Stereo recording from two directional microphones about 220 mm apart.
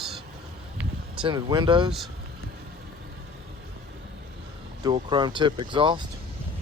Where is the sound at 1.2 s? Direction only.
20° right (ahead or behind).